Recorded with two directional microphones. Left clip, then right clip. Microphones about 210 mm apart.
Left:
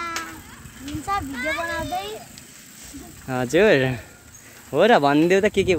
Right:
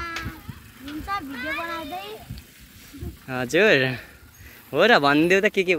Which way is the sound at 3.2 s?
15° left (ahead or behind).